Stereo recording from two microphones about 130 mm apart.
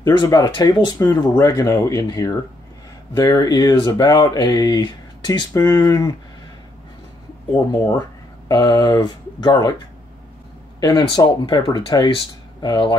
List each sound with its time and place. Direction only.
0.0 s speech: 35° left (ahead or behind)
8.5 s speech: 30° left (ahead or behind)
10.8 s speech: 35° left (ahead or behind)